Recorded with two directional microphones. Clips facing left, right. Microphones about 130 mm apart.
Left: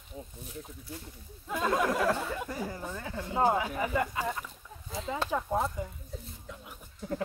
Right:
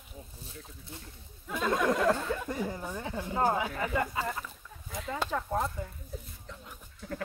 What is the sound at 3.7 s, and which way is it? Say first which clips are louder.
Speech: left 1 dB; 15° left (ahead or behind).